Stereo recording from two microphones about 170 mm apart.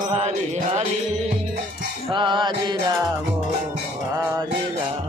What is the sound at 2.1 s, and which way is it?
Music, 30° right (ahead or behind).